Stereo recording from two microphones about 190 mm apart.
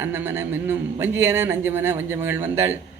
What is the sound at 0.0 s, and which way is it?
Speech, 10° right (ahead or behind).